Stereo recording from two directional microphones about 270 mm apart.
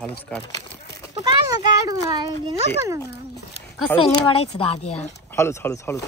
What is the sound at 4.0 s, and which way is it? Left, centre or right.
Speech, centre.